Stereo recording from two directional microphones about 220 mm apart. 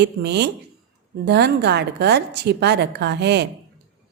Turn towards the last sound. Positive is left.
turn(degrees=-50)  # may be behind; listen again after turning